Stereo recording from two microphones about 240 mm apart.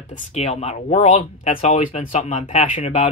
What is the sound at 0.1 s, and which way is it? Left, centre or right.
Speech, left.